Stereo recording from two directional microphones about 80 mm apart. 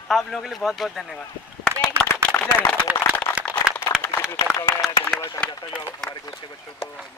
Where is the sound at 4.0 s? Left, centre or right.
Left.